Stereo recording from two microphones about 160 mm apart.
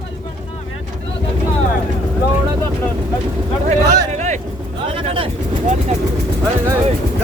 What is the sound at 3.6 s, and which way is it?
Speech, 45° right (ahead or behind).